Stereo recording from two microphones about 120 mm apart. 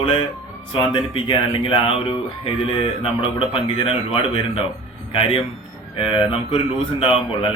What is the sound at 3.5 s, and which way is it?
Speech, 50° left (ahead or behind).